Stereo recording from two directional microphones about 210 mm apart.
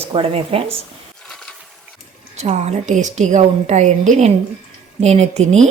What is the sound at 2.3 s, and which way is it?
A woman's voice, 30° right (ahead or behind).